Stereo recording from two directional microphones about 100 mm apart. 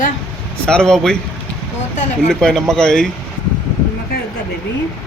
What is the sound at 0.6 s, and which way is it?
Speech, 10° left (ahead or behind).